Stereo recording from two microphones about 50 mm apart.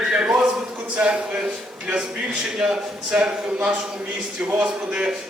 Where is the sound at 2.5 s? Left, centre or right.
Centre.